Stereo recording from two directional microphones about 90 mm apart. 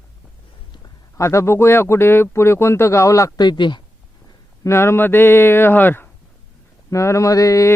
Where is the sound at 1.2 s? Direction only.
30° left (ahead or behind).